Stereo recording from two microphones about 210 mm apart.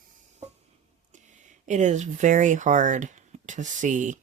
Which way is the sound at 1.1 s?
35° right (ahead or behind).